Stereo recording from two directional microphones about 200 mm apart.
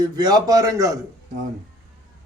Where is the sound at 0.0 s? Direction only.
20° right (ahead or behind).